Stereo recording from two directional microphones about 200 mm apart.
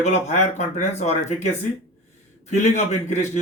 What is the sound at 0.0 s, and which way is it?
Speech, 35° left (ahead or behind).